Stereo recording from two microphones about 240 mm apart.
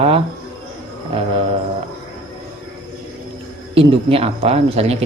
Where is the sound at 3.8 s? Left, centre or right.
Right.